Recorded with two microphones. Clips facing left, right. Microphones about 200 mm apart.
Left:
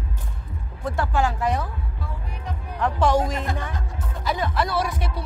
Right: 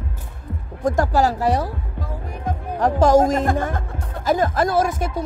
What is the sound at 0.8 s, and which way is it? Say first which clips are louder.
Music: right 6 dB; 45° right (ahead or behind).